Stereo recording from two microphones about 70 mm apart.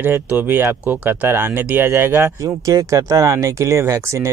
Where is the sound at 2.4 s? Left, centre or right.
Right.